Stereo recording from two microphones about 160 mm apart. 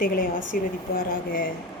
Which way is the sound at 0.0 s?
65° left (ahead or behind).